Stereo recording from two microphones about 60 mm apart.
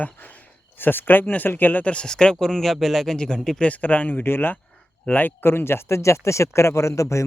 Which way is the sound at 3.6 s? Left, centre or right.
Left.